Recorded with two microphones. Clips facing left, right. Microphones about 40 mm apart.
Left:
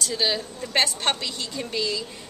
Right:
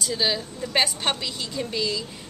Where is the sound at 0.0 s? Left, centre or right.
Centre.